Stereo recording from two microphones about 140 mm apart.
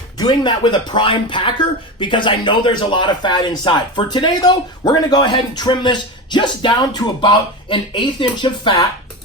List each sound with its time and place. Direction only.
0.2 s speech: 30° left (ahead or behind)